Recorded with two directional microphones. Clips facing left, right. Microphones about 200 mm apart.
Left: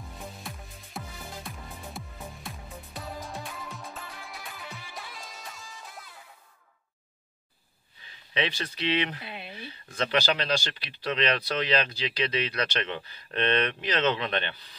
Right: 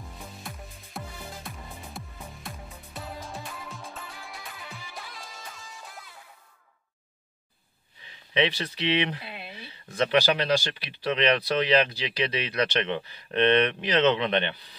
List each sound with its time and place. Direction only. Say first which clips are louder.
0.0 s music: left 1 dB; centre (ahead or behind)
8.3 s speech: right 5 dB; 25° right (ahead or behind)